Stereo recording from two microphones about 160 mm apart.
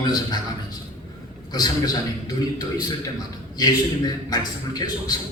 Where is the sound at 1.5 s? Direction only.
25° left (ahead or behind).